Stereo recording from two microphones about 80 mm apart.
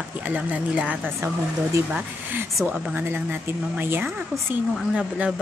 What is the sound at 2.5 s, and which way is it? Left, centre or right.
Speech, centre.